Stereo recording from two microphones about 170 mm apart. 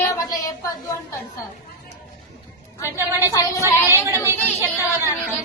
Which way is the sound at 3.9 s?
15° right (ahead or behind).